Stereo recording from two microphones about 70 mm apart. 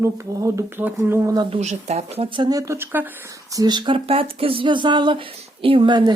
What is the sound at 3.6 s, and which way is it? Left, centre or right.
Speech, right.